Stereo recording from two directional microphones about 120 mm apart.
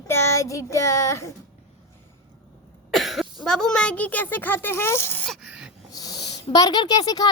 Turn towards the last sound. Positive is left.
turn(degrees=35)  # may be behind; listen again after turning